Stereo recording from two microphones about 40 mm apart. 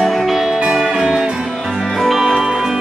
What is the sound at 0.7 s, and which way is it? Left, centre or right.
Music, centre.